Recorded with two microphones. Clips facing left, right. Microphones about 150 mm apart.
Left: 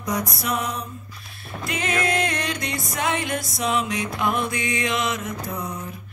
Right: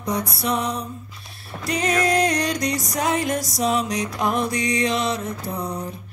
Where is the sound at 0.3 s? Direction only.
30° right (ahead or behind).